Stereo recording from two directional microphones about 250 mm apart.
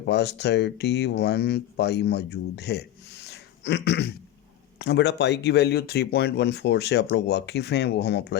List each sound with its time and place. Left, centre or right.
0.0 s speech: left